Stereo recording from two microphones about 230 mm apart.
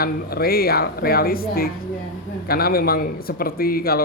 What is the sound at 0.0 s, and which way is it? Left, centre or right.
Speech, left.